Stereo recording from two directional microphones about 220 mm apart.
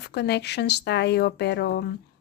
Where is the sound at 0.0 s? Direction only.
50° left (ahead or behind).